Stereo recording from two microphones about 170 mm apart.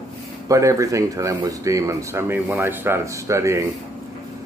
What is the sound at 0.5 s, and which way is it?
Speech, 20° right (ahead or behind).